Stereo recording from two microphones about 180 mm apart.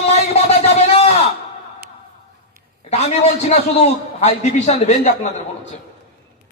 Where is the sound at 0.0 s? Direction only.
35° left (ahead or behind).